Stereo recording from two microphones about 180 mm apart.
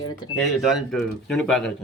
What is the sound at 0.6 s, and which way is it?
Speech, centre (ahead or behind).